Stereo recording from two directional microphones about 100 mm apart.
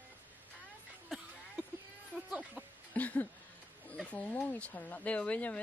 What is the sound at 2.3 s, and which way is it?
Speech, 15° right (ahead or behind).